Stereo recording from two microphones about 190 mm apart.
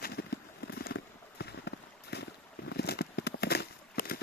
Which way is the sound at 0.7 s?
55° left (ahead or behind).